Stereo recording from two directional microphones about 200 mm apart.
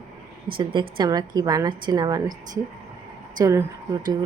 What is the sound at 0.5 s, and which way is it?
Speech, 25° right (ahead or behind).